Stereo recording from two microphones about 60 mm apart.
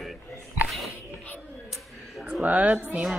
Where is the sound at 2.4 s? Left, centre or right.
Right.